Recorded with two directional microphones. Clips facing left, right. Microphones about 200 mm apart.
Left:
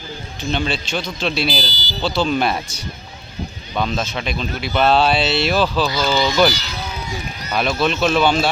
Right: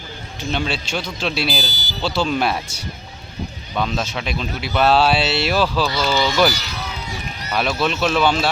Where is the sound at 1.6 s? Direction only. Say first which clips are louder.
Left 1 dB; 45° right (ahead or behind).